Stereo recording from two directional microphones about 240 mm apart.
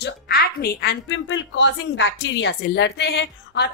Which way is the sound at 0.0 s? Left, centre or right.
Left.